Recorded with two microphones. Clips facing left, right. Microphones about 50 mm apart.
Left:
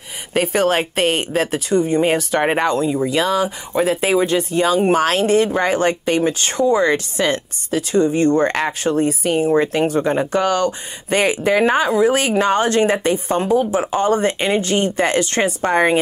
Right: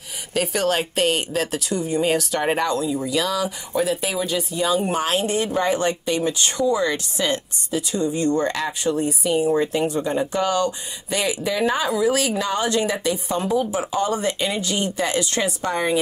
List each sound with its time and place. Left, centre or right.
0.3 s a woman's voice: left